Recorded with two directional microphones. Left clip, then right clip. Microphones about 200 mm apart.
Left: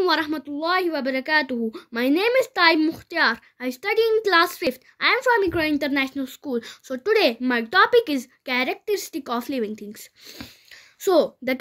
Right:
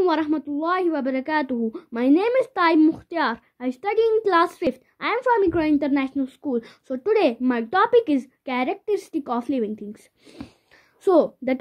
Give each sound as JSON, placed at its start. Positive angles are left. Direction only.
{"t": 0.0, "sound": "a woman's voice", "side_deg": 5}
{"t": 11.0, "sound": "a woman's voice", "side_deg": 5}